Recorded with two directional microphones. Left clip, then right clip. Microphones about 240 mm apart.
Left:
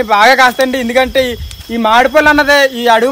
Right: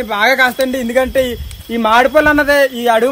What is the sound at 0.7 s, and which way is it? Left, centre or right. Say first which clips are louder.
Speech: left 3 dB; centre.